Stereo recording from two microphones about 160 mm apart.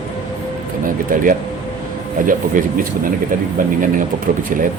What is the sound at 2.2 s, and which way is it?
A man's voice, 60° right (ahead or behind).